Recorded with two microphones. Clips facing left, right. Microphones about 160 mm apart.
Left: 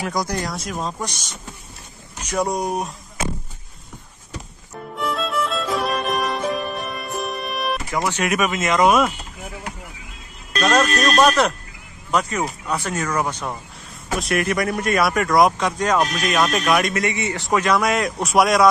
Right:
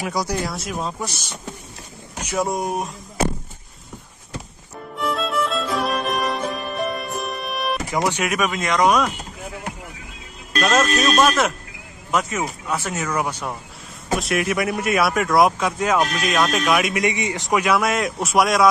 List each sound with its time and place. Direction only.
0.0 s speech: 10° right (ahead or behind)
2.2 s speech: centre (ahead or behind)
4.9 s music: centre (ahead or behind)
7.9 s speech: 20° right (ahead or behind)
8.2 s speech: centre (ahead or behind)
10.6 s speech: 5° right (ahead or behind)
16.9 s a man's voice: 15° right (ahead or behind); by 18.7 s centre (ahead or behind)